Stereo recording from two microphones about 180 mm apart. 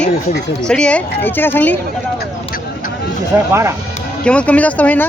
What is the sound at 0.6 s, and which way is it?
Speech, 5° left (ahead or behind).